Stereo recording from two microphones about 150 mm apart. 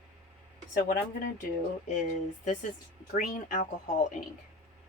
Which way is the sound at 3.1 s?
60° left (ahead or behind).